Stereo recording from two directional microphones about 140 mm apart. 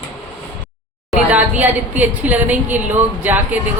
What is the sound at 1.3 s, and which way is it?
A woman's voice, 10° right (ahead or behind).